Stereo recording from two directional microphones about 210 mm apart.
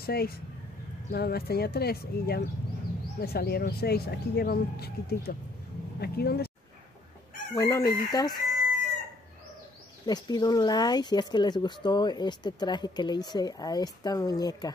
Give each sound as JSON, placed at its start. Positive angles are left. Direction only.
{"t": 0.0, "sound": "speech", "side_deg": 45}
{"t": 7.5, "sound": "chicken", "side_deg": 15}
{"t": 8.1, "sound": "speech", "side_deg": 20}
{"t": 10.0, "sound": "speech", "side_deg": 20}